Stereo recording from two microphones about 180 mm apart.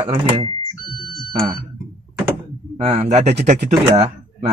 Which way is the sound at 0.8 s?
25° left (ahead or behind).